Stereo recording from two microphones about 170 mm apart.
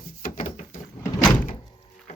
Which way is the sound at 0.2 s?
50° left (ahead or behind).